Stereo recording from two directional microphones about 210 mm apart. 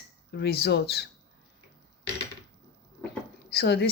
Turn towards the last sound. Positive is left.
turn(degrees=50)  # may be behind; listen again after turning